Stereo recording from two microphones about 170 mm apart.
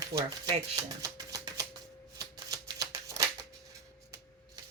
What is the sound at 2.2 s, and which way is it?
Shuffling cards, 20° right (ahead or behind).